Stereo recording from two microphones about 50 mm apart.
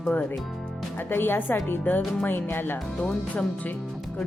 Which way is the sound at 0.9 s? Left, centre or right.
Left.